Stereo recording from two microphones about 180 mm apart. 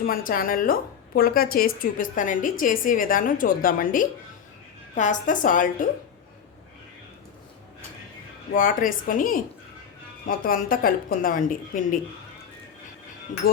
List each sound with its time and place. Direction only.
0.0 s a woman's voice: 55° left (ahead or behind)
8.5 s a woman's voice: 50° left (ahead or behind)
13.4 s a woman's voice: 55° left (ahead or behind)